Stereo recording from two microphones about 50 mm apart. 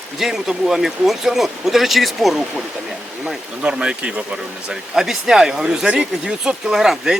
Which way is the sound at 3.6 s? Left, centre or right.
Centre.